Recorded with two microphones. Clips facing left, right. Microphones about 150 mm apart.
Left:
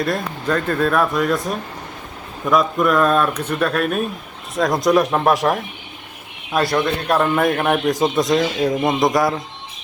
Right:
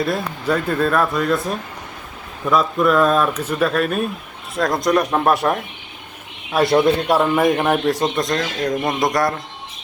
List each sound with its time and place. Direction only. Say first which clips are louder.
0.0 s a man's voice: even; 5° right (ahead or behind)
6.6 s speech: right 4 dB; 25° right (ahead or behind)
7.1 s a man's voice: right 1 dB; 5° right (ahead or behind)